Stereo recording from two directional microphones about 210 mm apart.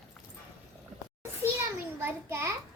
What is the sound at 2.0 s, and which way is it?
Speech, 10° right (ahead or behind).